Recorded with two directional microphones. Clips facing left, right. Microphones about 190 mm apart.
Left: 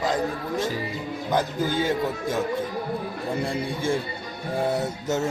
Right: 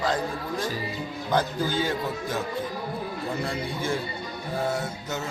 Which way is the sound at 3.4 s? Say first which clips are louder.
Left 3 dB; 30° left (ahead or behind).